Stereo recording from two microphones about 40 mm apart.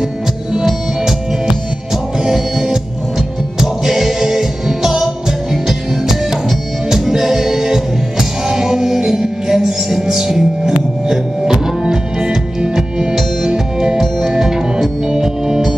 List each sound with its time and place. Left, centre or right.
2.2 s music: centre